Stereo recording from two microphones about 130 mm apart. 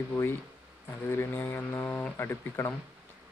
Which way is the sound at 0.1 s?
20° left (ahead or behind).